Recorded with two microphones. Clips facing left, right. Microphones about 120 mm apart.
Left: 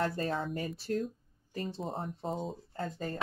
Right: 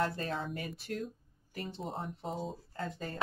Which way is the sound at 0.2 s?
40° left (ahead or behind).